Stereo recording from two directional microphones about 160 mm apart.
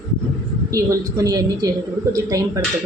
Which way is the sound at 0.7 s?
20° right (ahead or behind).